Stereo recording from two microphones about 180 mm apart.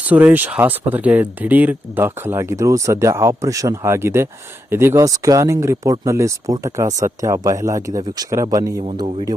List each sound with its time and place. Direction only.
0.1 s speech: 10° right (ahead or behind)
8.9 s speech: 30° right (ahead or behind)